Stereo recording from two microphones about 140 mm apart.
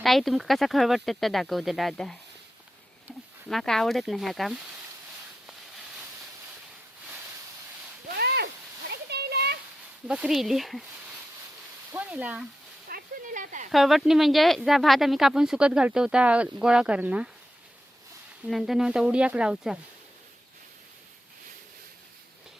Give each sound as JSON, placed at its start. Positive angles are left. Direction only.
{"t": 0.0, "sound": "speech", "side_deg": 0}
{"t": 3.5, "sound": "speech", "side_deg": 0}
{"t": 10.1, "sound": "speech", "side_deg": -5}
{"t": 11.9, "sound": "a sound", "side_deg": -10}
{"t": 12.9, "sound": "a sound", "side_deg": -70}
{"t": 13.7, "sound": "speech", "side_deg": 0}
{"t": 18.4, "sound": "speech", "side_deg": 0}